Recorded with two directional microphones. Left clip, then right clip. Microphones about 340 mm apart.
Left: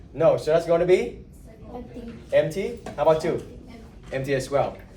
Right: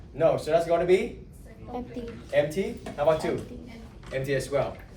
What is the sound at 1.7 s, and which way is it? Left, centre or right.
Speech, right.